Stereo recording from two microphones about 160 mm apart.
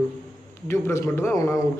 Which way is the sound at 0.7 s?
15° left (ahead or behind).